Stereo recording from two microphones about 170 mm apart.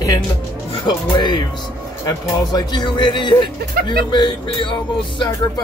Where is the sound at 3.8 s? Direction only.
60° right (ahead or behind).